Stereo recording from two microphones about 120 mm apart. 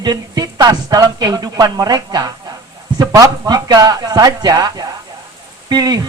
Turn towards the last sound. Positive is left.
turn(degrees=-35)  # may be behind; listen again after turning